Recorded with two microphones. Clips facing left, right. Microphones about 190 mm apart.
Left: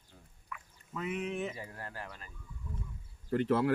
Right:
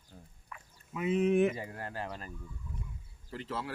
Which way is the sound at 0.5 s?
35° right (ahead or behind).